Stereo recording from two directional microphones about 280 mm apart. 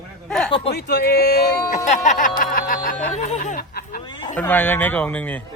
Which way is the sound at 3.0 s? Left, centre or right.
Left.